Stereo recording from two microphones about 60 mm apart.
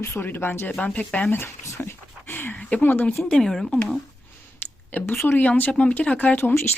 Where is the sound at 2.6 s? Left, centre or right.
Centre.